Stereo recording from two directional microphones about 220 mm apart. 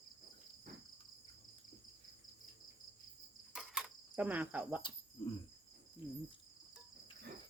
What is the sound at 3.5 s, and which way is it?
Cricket, 5° right (ahead or behind).